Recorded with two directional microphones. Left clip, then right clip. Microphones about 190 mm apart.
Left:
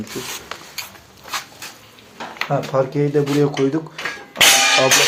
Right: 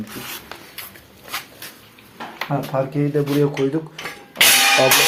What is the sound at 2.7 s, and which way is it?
Speech, 15° left (ahead or behind).